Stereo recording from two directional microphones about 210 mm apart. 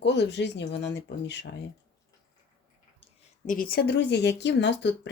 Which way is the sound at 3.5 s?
40° left (ahead or behind).